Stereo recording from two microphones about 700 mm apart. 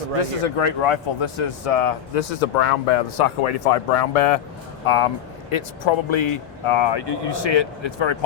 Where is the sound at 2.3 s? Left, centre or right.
Left.